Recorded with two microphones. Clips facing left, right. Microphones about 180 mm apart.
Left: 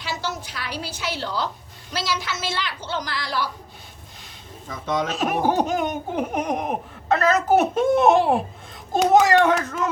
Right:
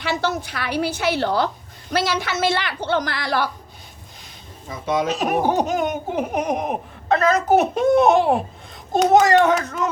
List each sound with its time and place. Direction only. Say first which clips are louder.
0.0 s a woman's voice: right 7 dB; 60° right (ahead or behind)
4.7 s speech: right 3 dB; 10° right (ahead or behind)